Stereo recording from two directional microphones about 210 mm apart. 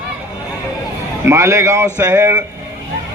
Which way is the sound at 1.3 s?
15° right (ahead or behind).